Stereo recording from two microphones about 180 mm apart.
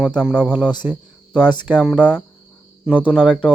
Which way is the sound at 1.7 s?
5° right (ahead or behind).